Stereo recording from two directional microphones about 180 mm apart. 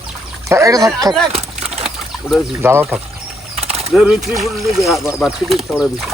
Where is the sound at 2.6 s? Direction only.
10° right (ahead or behind).